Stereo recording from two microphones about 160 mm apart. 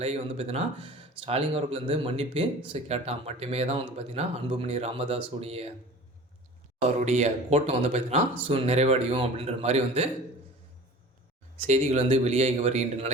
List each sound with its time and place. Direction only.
0.0 s speech: 40° right (ahead or behind)
6.8 s speech: 45° right (ahead or behind)
11.6 s speech: 45° right (ahead or behind)